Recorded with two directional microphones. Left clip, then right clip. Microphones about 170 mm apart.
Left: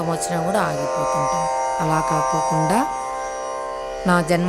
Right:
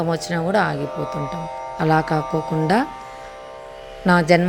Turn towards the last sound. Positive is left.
turn(degrees=-5)  # may be behind; listen again after turning